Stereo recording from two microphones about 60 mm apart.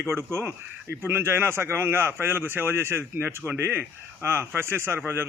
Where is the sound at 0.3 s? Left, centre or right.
Right.